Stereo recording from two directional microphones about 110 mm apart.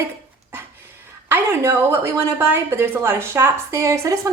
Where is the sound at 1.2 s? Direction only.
20° right (ahead or behind).